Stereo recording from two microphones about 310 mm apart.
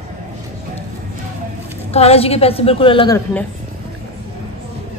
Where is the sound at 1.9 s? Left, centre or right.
Centre.